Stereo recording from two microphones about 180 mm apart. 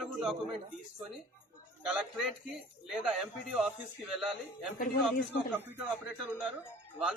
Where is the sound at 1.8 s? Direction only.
5° right (ahead or behind).